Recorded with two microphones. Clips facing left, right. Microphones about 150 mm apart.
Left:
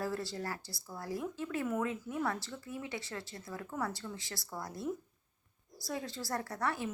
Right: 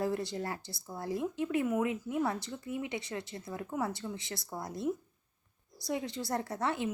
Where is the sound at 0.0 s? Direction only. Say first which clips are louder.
Right 4 dB; 20° right (ahead or behind).